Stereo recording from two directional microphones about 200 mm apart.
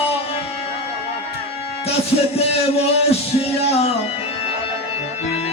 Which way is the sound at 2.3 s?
30° left (ahead or behind).